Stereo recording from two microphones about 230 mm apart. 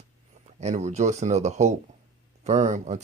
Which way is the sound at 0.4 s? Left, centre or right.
Right.